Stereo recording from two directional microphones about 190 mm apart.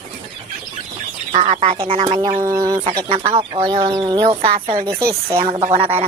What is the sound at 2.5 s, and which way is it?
Speech, 20° right (ahead or behind).